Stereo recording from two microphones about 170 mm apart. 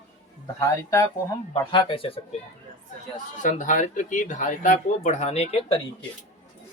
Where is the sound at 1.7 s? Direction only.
30° left (ahead or behind).